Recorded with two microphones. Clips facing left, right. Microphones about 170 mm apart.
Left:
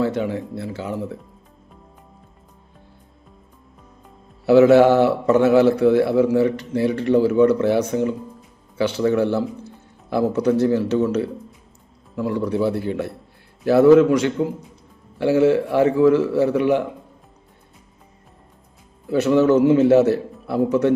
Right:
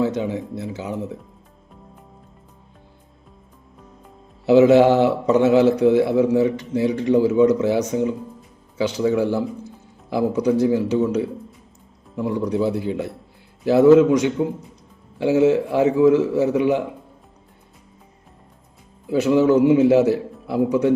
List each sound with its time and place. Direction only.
0.0 s a man's voice: 15° right (ahead or behind)
4.4 s a man's voice: 15° right (ahead or behind)
19.0 s a man's voice: 15° right (ahead or behind)